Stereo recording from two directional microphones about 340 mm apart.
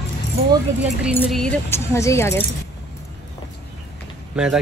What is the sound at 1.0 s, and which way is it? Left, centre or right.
A woman's voice, centre.